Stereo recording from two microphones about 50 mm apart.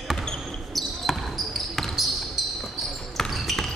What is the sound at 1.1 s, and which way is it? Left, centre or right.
Basketball bounce, centre.